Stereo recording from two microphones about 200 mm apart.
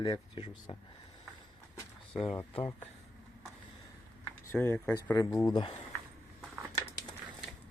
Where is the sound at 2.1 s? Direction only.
Centre (ahead or behind).